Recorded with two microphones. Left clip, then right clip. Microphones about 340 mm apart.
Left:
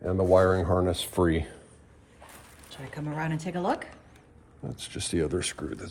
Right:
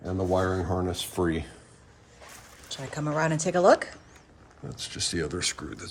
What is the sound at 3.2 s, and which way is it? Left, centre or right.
Speech, centre.